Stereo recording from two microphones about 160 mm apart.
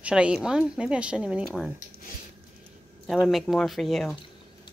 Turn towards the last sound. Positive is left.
turn(degrees=0)  # may be behind; listen again after turning